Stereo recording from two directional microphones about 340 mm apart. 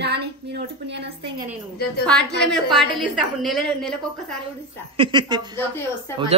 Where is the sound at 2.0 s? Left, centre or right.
Centre.